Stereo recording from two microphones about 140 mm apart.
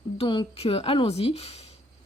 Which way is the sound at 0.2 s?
40° left (ahead or behind).